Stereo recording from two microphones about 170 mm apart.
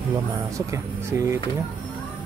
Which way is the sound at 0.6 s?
15° right (ahead or behind).